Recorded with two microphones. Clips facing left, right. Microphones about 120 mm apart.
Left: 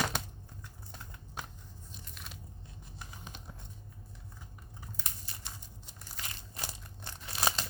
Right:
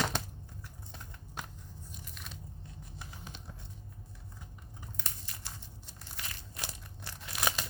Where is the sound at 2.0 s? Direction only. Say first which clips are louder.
Even; centre (ahead or behind).